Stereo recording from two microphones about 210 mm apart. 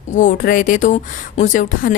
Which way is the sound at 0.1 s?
35° left (ahead or behind).